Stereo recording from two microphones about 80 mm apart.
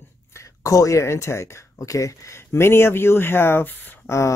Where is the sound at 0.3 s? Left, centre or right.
Left.